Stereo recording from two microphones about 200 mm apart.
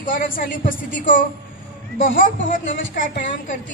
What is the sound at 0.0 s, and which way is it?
A woman's voice, 45° left (ahead or behind).